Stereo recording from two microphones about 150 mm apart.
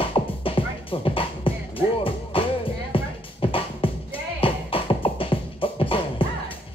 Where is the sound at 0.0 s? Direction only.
35° left (ahead or behind).